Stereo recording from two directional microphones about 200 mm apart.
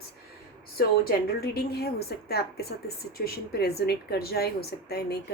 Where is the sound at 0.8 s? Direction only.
50° left (ahead or behind).